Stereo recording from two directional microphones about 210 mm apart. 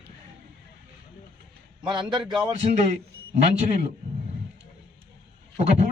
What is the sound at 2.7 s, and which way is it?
A man's voice, 35° right (ahead or behind).